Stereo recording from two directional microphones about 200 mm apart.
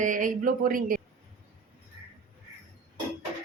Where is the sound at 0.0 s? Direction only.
40° right (ahead or behind).